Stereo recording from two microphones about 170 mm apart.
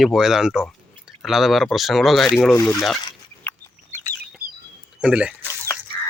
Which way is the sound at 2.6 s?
15° left (ahead or behind).